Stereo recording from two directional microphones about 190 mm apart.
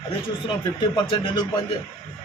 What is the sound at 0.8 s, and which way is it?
Speech, 25° left (ahead or behind).